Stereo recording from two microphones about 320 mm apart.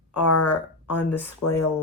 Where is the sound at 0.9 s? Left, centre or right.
Centre.